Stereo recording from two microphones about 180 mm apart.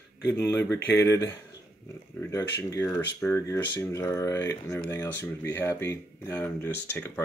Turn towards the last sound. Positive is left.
turn(degrees=10)  # may be behind; listen again after turning